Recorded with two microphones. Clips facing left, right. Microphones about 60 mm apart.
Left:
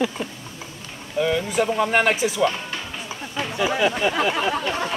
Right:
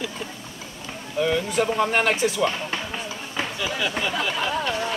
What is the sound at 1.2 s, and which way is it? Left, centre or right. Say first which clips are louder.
Speech: left 1 dB; centre.